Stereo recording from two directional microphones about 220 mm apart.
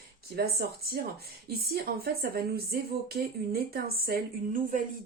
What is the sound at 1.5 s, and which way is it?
Speech, 45° right (ahead or behind).